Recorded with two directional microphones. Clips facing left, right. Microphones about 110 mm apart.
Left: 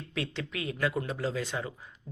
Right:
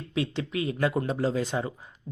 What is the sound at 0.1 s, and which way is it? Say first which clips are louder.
Speech: right 6 dB; 20° right (ahead or behind).